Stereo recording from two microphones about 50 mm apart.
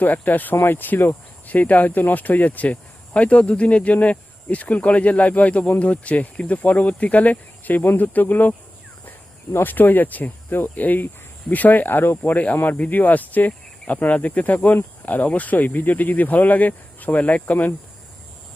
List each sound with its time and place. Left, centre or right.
0.0 s speech: left
0.5 s speech: left
9.6 s speech: left